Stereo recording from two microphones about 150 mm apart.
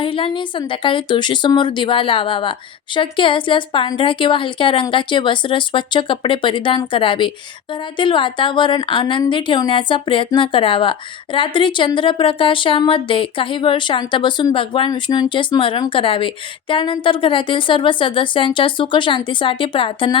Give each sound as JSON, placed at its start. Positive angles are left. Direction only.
{"t": 0.0, "sound": "a woman's voice", "side_deg": 35}